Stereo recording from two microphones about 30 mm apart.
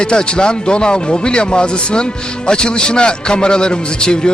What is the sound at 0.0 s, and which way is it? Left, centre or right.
Speech, left.